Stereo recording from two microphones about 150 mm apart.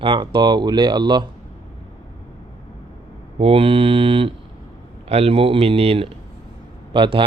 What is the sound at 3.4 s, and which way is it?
Speech, 40° right (ahead or behind).